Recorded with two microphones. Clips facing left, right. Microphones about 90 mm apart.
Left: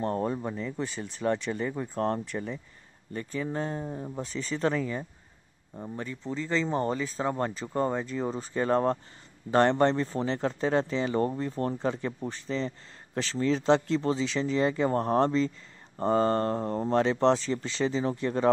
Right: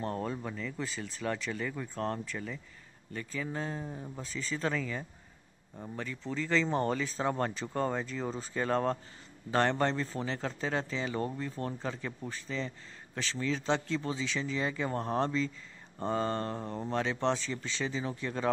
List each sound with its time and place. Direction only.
0.0 s speech: 35° left (ahead or behind)
0.8 s speech: 35° left (ahead or behind)
3.8 s speech: 20° left (ahead or behind)
4.2 s speech: 35° left (ahead or behind)
7.9 s speech: 15° left (ahead or behind)
8.5 s speech: 30° left (ahead or behind)